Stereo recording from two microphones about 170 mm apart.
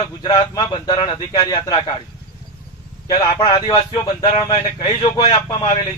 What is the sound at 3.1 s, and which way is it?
A man's voice, 25° left (ahead or behind).